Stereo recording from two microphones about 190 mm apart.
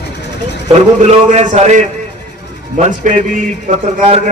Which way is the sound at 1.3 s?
35° right (ahead or behind).